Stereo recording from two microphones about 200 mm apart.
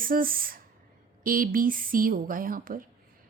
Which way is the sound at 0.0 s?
45° right (ahead or behind).